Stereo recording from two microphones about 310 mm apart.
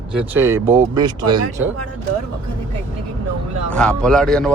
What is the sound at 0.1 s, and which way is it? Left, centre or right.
Speech, centre.